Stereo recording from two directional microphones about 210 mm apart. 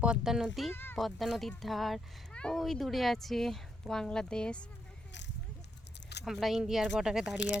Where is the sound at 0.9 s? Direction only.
Centre (ahead or behind).